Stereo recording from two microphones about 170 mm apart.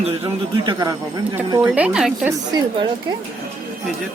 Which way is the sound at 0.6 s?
25° right (ahead or behind).